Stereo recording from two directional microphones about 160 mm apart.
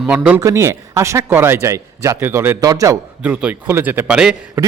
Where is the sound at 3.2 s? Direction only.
10° right (ahead or behind).